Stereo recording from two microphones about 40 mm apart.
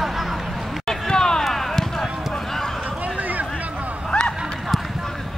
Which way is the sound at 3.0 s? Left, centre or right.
Right.